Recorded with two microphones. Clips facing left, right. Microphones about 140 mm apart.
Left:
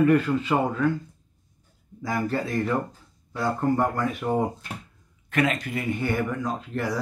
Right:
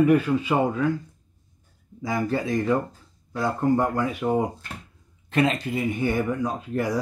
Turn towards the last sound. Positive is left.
turn(degrees=-15)  # may be behind; listen again after turning